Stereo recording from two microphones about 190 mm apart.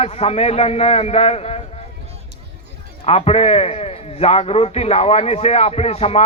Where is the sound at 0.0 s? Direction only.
35° left (ahead or behind).